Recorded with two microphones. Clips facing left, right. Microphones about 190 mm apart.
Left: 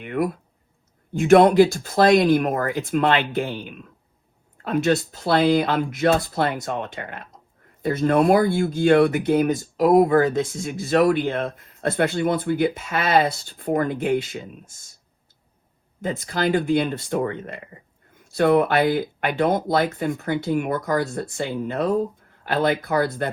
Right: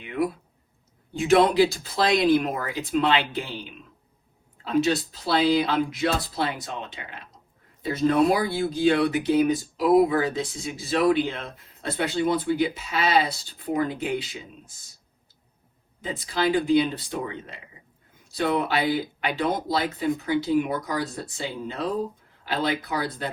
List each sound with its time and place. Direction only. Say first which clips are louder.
0.0 s a sound: left 2 dB; 55° left (ahead or behind)
1.1 s speech: left 5 dB; 50° left (ahead or behind)
16.0 s speech: left 2 dB; 50° left (ahead or behind)